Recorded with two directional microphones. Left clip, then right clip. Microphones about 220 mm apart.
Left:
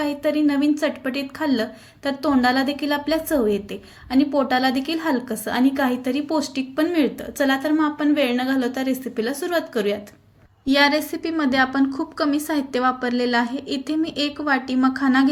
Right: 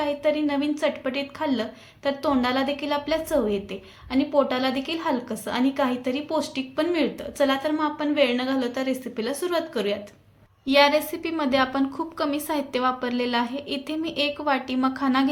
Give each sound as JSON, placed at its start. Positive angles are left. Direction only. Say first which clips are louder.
{"t": 0.0, "sound": "a woman's voice", "louder": "left 2 dB", "side_deg": 15}